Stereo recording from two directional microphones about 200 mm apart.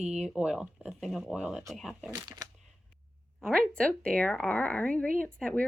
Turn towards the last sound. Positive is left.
turn(degrees=5)  # may be behind; listen again after turning